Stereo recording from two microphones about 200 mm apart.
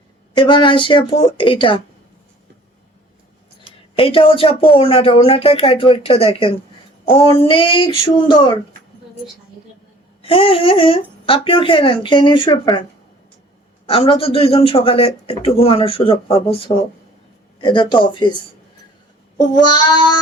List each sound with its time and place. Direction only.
0.3 s speech: 25° left (ahead or behind)
3.9 s speech: 25° left (ahead or behind)
7.0 s child singing: 30° left (ahead or behind)
7.4 s speech: 25° left (ahead or behind)
10.2 s speech: 30° left (ahead or behind)
13.8 s speech: 30° left (ahead or behind)